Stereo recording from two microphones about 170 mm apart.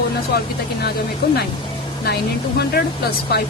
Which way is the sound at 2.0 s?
70° left (ahead or behind).